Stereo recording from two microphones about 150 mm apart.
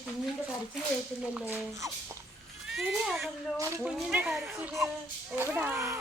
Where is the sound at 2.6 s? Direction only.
Centre (ahead or behind).